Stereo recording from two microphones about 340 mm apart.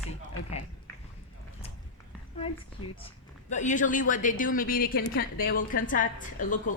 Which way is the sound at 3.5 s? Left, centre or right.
Left.